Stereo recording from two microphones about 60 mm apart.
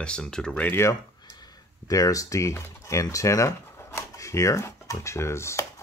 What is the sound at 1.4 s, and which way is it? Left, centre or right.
Speech, left.